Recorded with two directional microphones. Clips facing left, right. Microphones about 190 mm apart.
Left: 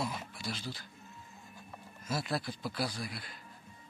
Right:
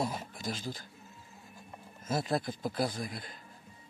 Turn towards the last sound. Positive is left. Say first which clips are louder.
# right 4 dB
turn(degrees=-45)  # may be behind; listen again after turning